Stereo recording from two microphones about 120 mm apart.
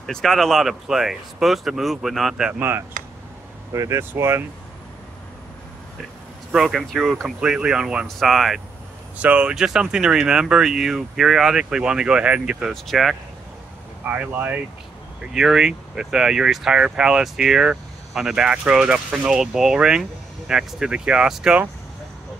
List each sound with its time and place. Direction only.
0.0 s speech: centre (ahead or behind)
3.7 s speech: 25° right (ahead or behind)
6.5 s speech: centre (ahead or behind)
14.0 s speech: 15° right (ahead or behind)